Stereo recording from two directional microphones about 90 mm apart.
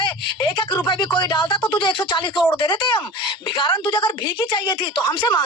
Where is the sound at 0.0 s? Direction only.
65° left (ahead or behind).